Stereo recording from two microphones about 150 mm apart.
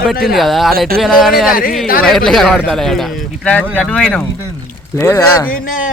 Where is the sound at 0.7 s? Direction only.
90° right.